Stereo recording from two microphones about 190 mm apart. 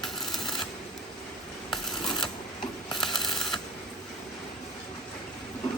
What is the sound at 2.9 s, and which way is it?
Camera, centre (ahead or behind).